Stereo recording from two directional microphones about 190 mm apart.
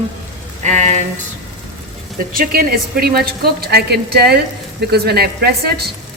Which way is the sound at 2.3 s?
50° right (ahead or behind).